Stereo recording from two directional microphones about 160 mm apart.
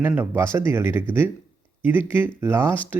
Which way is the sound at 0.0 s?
10° right (ahead or behind).